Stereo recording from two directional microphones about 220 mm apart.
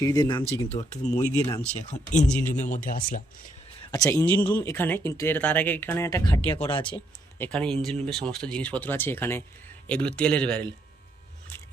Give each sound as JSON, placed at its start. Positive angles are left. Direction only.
{"t": 0.0, "sound": "speech", "side_deg": 15}
{"t": 0.7, "sound": "speech", "side_deg": 30}
{"t": 1.4, "sound": "speech", "side_deg": 10}
{"t": 1.9, "sound": "speech", "side_deg": 35}
{"t": 3.9, "sound": "speech", "side_deg": 15}
{"t": 6.7, "sound": "speech", "side_deg": 25}
{"t": 7.3, "sound": "speech", "side_deg": 5}